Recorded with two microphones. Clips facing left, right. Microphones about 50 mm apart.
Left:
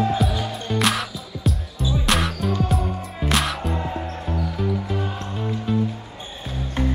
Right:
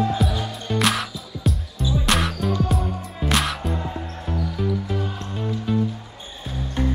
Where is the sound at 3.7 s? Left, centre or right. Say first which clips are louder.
Left 2 dB; left.